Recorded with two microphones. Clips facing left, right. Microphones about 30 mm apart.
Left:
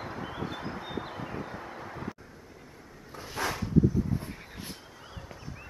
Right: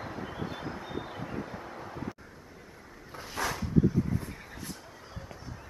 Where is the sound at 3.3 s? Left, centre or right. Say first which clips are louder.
Left 1 dB; centre.